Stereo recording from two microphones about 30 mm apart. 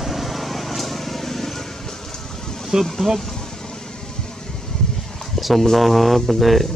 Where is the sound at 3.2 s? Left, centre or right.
Left.